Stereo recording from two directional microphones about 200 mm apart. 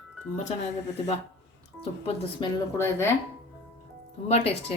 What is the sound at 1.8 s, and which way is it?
Speech, 30° left (ahead or behind).